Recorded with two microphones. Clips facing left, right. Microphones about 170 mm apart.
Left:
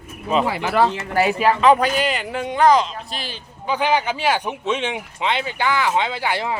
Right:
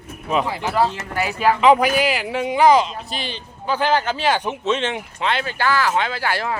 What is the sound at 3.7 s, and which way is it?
Speech, 15° left (ahead or behind).